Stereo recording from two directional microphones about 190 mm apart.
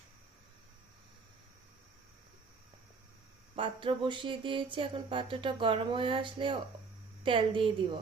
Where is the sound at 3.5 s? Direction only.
25° right (ahead or behind).